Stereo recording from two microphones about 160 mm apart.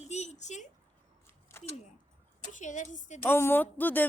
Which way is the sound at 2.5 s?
50° left (ahead or behind).